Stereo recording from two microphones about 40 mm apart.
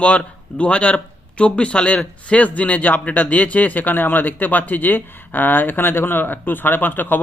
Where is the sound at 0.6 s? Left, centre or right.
Left.